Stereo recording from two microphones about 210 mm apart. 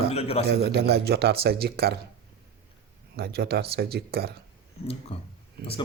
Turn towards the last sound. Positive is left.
turn(degrees=-45)  # may be behind; listen again after turning